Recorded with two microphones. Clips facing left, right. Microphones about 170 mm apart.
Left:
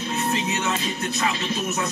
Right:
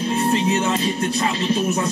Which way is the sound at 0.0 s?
35° right (ahead or behind).